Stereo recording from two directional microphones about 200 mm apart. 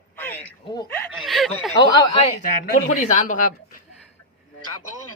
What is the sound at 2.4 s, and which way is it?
Speech, 45° left (ahead or behind).